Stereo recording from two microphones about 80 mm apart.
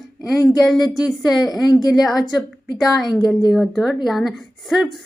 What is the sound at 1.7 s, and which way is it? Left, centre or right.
Speech, left.